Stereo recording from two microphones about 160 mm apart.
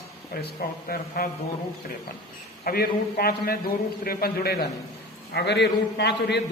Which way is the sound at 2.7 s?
70° left (ahead or behind).